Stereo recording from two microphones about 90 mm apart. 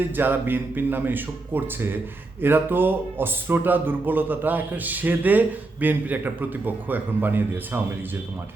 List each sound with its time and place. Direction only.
0.2 s a man's voice: 20° right (ahead or behind)